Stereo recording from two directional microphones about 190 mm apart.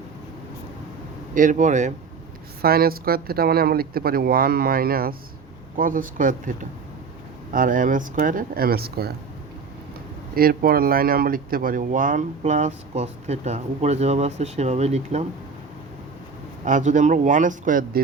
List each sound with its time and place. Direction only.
1.4 s speech: 40° right (ahead or behind)
2.6 s speech: 55° right (ahead or behind)
7.5 s speech: 45° right (ahead or behind)
10.3 s speech: 50° right (ahead or behind); by 15.3 s 35° right (ahead or behind)
16.6 s speech: 40° right (ahead or behind)